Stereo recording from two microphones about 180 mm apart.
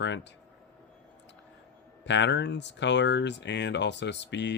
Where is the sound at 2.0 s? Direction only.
80° left.